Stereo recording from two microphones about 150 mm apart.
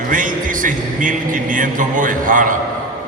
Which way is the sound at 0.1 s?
65° right (ahead or behind).